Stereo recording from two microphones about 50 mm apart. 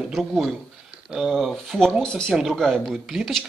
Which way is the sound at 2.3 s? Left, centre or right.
Centre.